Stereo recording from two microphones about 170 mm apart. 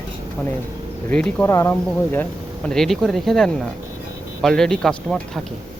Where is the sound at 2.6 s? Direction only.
Centre (ahead or behind).